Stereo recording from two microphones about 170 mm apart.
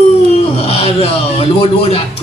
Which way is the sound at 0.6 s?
35° left (ahead or behind).